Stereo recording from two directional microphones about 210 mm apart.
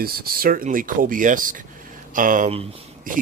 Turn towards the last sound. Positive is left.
turn(degrees=-40)  # may be behind; listen again after turning